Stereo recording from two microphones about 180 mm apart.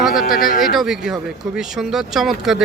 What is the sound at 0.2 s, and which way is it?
Speech, 50° left (ahead or behind).